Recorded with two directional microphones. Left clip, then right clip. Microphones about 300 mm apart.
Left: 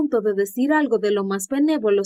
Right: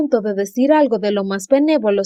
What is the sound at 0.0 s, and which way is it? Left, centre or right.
Speech, centre.